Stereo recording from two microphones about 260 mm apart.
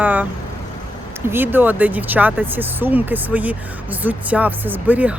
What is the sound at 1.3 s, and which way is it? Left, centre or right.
Speech, centre.